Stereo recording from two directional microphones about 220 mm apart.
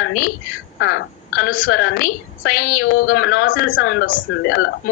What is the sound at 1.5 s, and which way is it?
A woman's voice, 45° left (ahead or behind).